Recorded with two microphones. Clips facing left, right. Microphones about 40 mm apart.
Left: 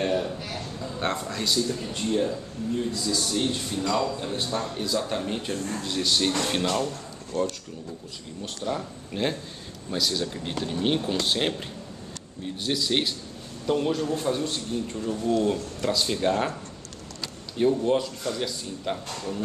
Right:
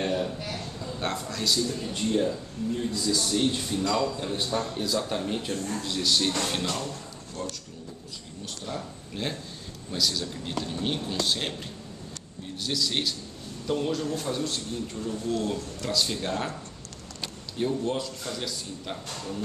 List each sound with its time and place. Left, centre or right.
0.0 s a man's voice: centre
8.6 s speech: centre
12.5 s speech: centre
17.6 s speech: centre